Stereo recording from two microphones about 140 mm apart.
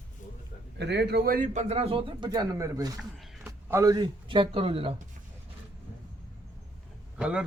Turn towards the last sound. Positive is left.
turn(degrees=-10)  # may be behind; listen again after turning